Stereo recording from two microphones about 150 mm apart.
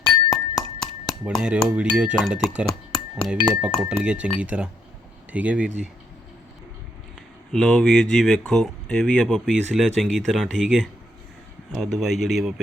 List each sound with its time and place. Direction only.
0.0 s glass: 25° left (ahead or behind)
1.3 s speech: 5° right (ahead or behind)
7.5 s speech: 5° left (ahead or behind)